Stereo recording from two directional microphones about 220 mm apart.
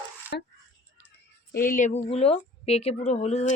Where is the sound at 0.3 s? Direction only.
45° left (ahead or behind).